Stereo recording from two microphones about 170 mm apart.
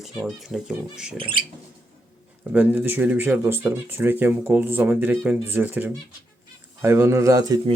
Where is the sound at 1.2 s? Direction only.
30° right (ahead or behind).